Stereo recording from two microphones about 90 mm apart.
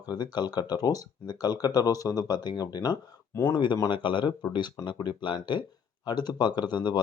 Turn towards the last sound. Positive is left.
turn(degrees=55)  # may be behind; listen again after turning